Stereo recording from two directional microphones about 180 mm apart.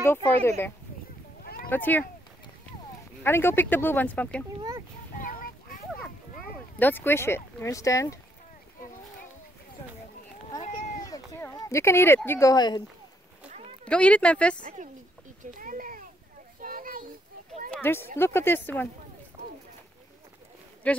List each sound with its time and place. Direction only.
0.0 s speech: 15° left (ahead or behind)
3.3 s speech: 10° left (ahead or behind)
4.6 s a sound: 20° right (ahead or behind)
5.1 s a sound: 50° left (ahead or behind)
6.8 s speech: 10° left (ahead or behind)
11.1 s speech: 15° left (ahead or behind)
13.5 s a sound: 40° right (ahead or behind)
13.8 s speech: 5° left (ahead or behind)
14.6 s speech: 45° right (ahead or behind)
15.6 s a sound: 50° right (ahead or behind)
16.6 s children playing: 50° right (ahead or behind)
17.8 s speech: 10° left (ahead or behind)
20.9 s a man's voice: 5° left (ahead or behind)